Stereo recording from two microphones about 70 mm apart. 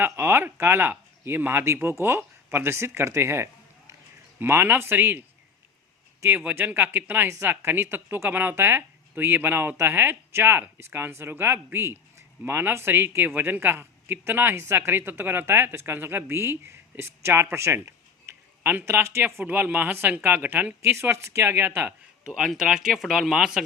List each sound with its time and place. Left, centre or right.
0.0 s speech: right
6.3 s speech: right
18.7 s speech: right
22.4 s speech: centre